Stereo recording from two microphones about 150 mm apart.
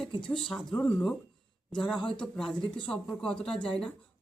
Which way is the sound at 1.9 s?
30° left (ahead or behind).